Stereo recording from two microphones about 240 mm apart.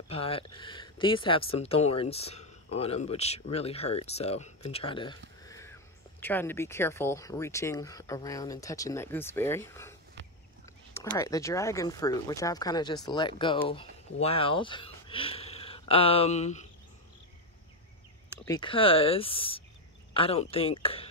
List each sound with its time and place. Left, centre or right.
0.1 s speech: left
5.5 s a sound: centre
6.2 s speech: centre; by 16.6 s left
18.4 s speech: centre